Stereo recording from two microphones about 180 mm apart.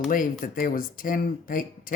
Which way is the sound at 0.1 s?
50° left (ahead or behind).